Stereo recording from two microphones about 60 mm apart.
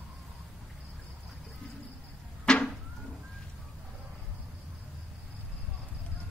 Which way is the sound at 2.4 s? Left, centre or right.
Centre.